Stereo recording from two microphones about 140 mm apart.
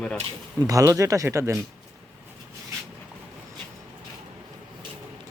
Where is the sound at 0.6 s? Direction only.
25° right (ahead or behind).